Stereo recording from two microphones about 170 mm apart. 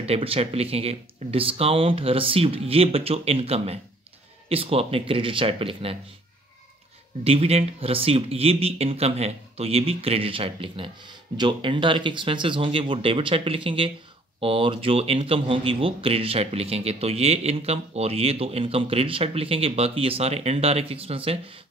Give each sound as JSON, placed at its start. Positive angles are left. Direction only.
{"t": 0.0, "sound": "speech", "side_deg": -35}
{"t": 7.2, "sound": "speech", "side_deg": -35}